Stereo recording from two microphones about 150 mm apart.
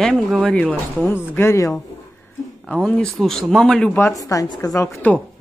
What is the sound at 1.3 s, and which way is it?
Speech, 20° left (ahead or behind).